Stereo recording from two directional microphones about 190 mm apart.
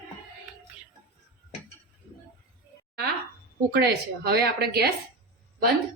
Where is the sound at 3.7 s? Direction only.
60° right (ahead or behind).